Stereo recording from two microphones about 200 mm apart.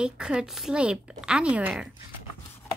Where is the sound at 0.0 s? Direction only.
5° right (ahead or behind).